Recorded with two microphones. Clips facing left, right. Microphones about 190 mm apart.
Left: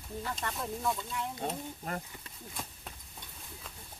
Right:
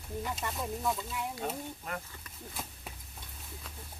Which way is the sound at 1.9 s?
35° left (ahead or behind).